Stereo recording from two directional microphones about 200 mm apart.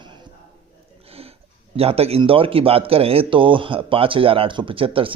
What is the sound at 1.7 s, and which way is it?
Speech, 30° right (ahead or behind).